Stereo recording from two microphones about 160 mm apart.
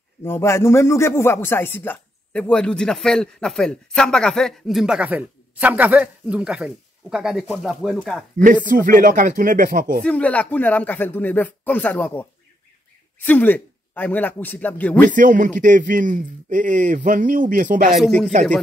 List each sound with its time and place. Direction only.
0.2 s a man's voice: 15° left (ahead or behind)
8.6 s a man's voice: 55° right (ahead or behind)
10.0 s speech: 10° left (ahead or behind)
15.0 s a man's voice: 55° right (ahead or behind)
17.9 s a man's voice: centre (ahead or behind)